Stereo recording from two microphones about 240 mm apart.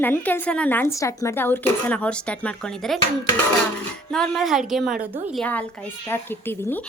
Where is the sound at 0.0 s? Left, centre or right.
Centre.